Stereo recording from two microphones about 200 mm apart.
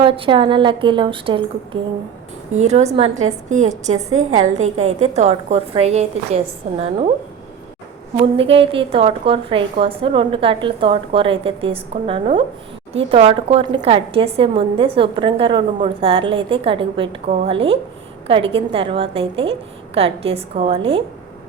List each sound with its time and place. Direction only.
0.0 s a woman's voice: 25° right (ahead or behind)
3.9 s a woman's voice: 90° right
5.1 s a woman's voice: 35° right (ahead or behind)
8.2 s a woman's voice: 30° right (ahead or behind)